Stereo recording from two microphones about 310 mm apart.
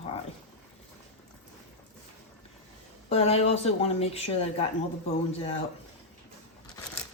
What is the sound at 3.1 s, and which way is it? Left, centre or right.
Speech, centre.